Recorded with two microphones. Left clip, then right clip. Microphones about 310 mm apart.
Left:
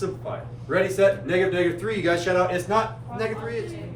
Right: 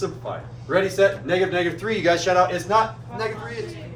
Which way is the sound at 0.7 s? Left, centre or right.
Centre.